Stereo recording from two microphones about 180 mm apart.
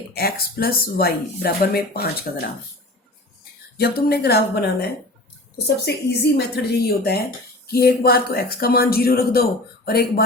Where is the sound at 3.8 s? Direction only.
60° left (ahead or behind).